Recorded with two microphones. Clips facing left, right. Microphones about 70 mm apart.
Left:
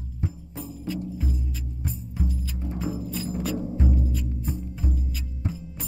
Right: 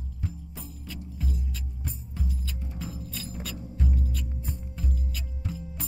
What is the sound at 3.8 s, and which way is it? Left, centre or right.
Music, centre.